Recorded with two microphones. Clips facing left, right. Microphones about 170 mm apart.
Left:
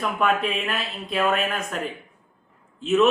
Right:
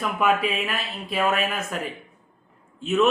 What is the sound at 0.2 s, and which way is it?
Speech, 5° right (ahead or behind).